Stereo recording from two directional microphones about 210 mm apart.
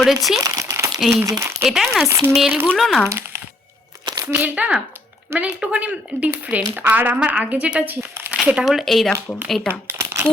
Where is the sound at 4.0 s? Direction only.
20° right (ahead or behind).